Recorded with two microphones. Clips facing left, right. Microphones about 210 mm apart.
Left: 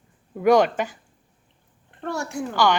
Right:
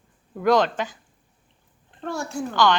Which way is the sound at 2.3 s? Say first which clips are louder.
Right 1 dB; 10° left (ahead or behind).